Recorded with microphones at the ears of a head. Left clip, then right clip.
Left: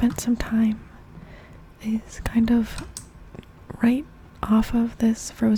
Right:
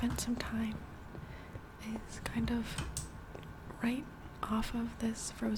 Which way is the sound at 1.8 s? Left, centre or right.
Left.